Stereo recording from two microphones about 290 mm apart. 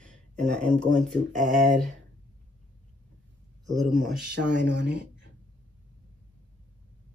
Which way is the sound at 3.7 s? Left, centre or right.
Centre.